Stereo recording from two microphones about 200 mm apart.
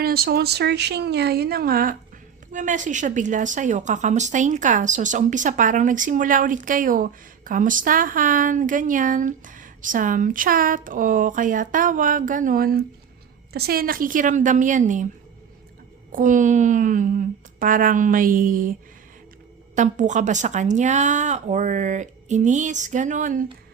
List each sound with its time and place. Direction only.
0.0 s a woman's voice: 50° right (ahead or behind)
16.1 s a woman's voice: 40° right (ahead or behind)
19.7 s a woman's voice: 40° right (ahead or behind)